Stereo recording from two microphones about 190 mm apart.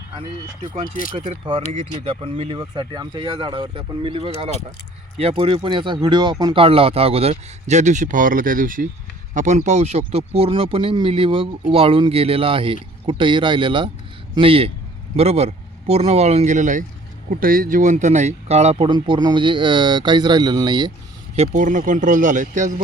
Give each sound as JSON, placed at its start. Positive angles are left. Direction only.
{"t": 1.1, "sound": "speech", "side_deg": -25}
{"t": 2.6, "sound": "speech", "side_deg": -20}
{"t": 21.3, "sound": "speech", "side_deg": -35}